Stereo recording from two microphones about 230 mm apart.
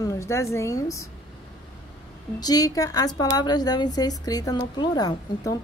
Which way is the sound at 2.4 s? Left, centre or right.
Centre.